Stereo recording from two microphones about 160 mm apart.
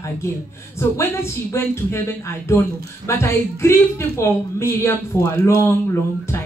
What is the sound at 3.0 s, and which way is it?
A woman's voice, 15° left (ahead or behind).